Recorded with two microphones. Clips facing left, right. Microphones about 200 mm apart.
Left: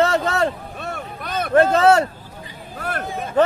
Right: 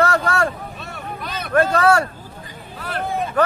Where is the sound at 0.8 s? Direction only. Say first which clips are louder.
Left 1 dB; 50° left (ahead or behind).